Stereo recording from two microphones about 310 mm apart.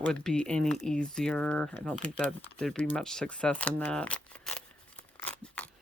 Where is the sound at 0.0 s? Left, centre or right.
Centre.